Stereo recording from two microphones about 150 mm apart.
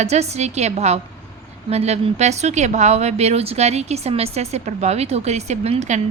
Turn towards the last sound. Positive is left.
turn(degrees=-50)  # may be behind; listen again after turning